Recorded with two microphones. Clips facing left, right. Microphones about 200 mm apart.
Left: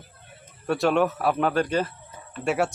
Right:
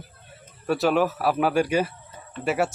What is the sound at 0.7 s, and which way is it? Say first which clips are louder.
A man's voice: even; 5° right (ahead or behind).